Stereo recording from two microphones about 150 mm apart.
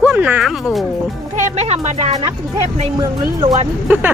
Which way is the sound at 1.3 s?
50° right (ahead or behind).